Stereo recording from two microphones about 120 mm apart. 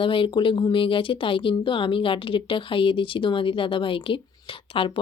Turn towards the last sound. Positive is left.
turn(degrees=50)  # may be behind; listen again after turning